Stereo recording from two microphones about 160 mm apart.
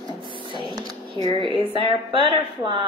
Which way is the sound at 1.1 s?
30° left (ahead or behind).